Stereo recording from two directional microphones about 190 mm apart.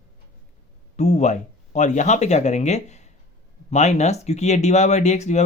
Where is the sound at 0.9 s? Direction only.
35° left (ahead or behind).